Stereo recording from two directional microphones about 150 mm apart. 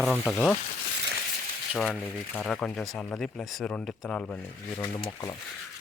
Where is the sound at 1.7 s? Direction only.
5° left (ahead or behind).